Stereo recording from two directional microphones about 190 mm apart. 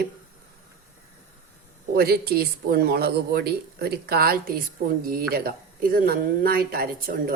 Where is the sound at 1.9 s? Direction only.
55° right (ahead or behind).